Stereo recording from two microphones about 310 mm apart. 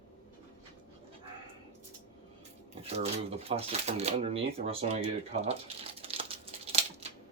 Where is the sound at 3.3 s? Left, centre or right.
Centre.